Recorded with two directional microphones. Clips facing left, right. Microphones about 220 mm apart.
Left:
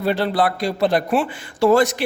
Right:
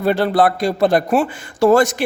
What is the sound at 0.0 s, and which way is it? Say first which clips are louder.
A man's voice: right 4 dB; 50° right (ahead or behind).